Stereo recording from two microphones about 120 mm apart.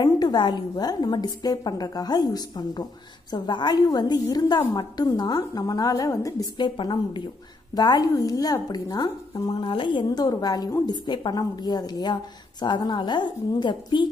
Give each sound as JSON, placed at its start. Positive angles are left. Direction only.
{"t": 0.0, "sound": "a woman's voice", "side_deg": 35}
{"t": 6.6, "sound": "a woman's voice", "side_deg": 40}
{"t": 9.5, "sound": "a woman's voice", "side_deg": 45}